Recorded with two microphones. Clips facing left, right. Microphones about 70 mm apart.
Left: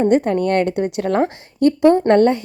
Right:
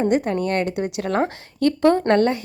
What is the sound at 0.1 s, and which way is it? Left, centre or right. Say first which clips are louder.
A woman's voice: left 5 dB; left.